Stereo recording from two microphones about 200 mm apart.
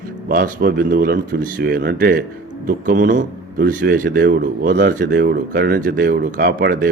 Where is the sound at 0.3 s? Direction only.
45° right (ahead or behind).